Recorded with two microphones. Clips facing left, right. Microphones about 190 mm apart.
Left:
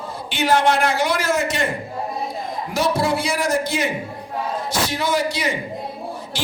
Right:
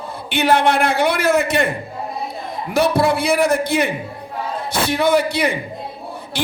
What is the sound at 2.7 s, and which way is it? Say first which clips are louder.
Speech: right 4 dB; 60° right (ahead or behind).